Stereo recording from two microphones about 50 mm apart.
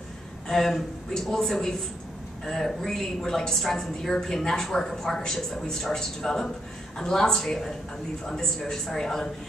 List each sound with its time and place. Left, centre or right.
0.5 s a woman's voice: centre